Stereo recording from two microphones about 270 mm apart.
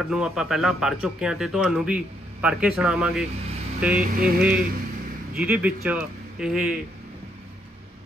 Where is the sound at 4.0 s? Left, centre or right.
Right.